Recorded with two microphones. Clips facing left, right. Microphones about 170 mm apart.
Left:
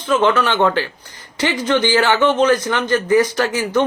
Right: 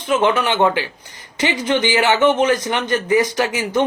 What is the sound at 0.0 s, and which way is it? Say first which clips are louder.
A man's voice: left 1 dB; 15° right (ahead or behind).